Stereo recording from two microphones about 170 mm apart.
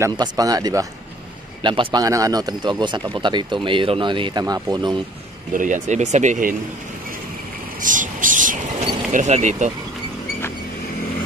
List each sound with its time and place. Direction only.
0.0 s a man's voice: 20° right (ahead or behind)
5.5 s speech: 50° right (ahead or behind)
7.8 s speech: 50° right (ahead or behind)